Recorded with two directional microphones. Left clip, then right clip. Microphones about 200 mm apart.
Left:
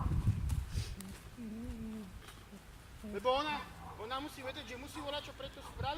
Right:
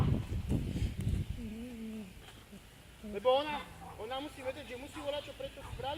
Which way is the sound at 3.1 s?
40° left (ahead or behind).